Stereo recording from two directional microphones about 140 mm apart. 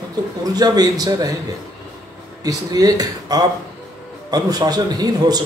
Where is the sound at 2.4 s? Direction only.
25° right (ahead or behind).